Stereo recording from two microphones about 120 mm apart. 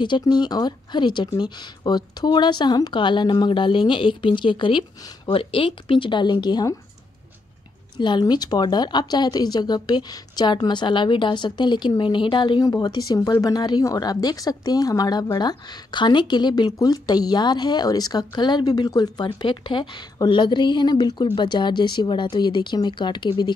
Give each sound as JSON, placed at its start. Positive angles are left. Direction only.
{"t": 0.0, "sound": "a woman's voice", "side_deg": 40}
{"t": 8.0, "sound": "a woman's voice", "side_deg": 40}